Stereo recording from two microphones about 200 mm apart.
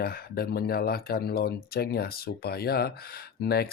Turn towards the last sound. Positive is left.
turn(degrees=50)  # may be behind; listen again after turning